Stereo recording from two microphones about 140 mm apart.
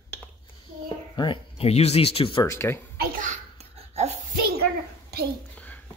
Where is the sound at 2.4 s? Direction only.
20° left (ahead or behind).